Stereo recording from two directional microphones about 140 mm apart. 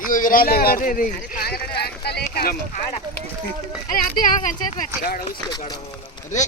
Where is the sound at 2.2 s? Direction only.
90° left.